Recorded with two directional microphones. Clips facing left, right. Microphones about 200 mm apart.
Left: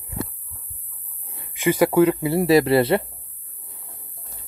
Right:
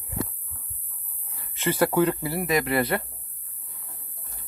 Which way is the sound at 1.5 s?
10° left (ahead or behind).